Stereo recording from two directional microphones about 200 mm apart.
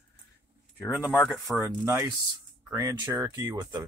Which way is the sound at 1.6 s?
15° right (ahead or behind).